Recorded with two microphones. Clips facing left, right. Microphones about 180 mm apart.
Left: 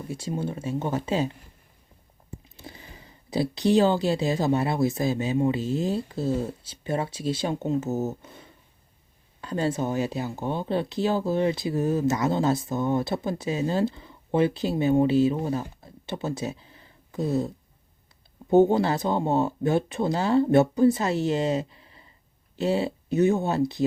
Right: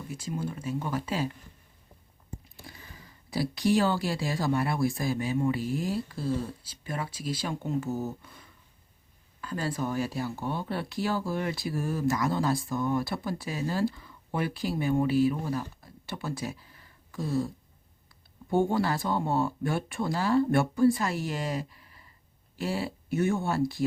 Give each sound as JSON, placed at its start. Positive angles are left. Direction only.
{"t": 0.0, "sound": "speech", "side_deg": 30}
{"t": 2.6, "sound": "speech", "side_deg": 25}
{"t": 18.5, "sound": "speech", "side_deg": 20}